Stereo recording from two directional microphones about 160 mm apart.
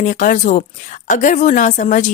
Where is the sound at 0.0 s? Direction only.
50° left (ahead or behind).